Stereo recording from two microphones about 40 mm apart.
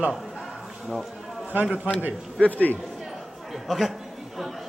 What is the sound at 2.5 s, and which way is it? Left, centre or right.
Speech, left.